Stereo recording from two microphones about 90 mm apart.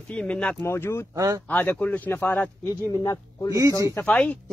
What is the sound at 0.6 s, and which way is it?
Speech, 25° left (ahead or behind).